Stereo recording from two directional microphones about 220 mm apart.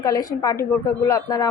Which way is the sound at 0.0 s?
15° left (ahead or behind).